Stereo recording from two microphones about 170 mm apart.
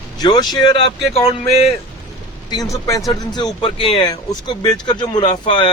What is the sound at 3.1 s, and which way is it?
Speech, 25° left (ahead or behind).